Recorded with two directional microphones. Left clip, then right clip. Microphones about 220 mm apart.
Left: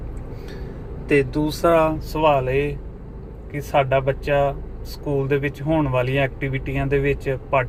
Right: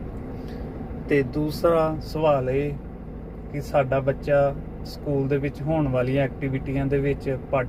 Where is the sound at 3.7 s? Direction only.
10° left (ahead or behind).